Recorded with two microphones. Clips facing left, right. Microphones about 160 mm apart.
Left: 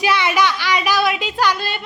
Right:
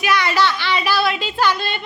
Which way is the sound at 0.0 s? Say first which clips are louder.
Left 1 dB; 25° left (ahead or behind).